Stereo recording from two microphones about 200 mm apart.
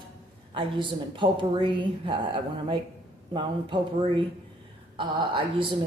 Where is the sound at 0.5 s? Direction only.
25° right (ahead or behind).